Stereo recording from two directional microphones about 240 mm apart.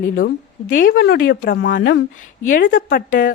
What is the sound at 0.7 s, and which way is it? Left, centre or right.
A woman's voice, left.